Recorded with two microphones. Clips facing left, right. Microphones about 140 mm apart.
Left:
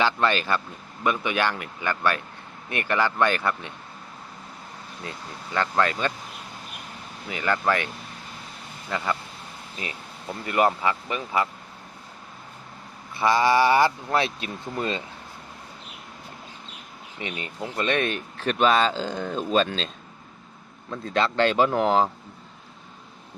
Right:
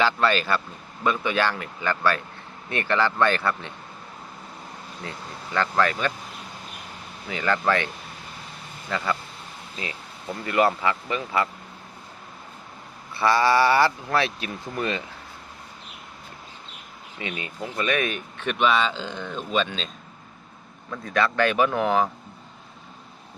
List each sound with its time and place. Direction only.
0.0 s speech: 20° left (ahead or behind)
5.5 s speech: 20° left (ahead or behind)
7.3 s speech: 15° left (ahead or behind)
10.4 s speech: 20° left (ahead or behind)
13.1 s speech: 15° left (ahead or behind)
17.2 s speech: 25° left (ahead or behind); by 19.8 s 40° left (ahead or behind)
20.9 s speech: 25° left (ahead or behind)